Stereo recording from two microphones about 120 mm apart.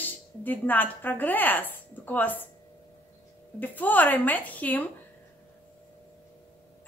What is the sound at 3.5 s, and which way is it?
A woman's voice, 15° left (ahead or behind).